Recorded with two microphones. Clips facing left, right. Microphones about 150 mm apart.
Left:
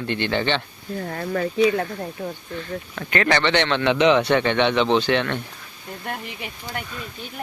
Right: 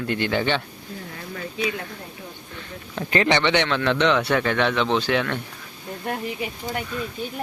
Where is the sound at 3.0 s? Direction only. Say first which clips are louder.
Right 2 dB; 30° right (ahead or behind).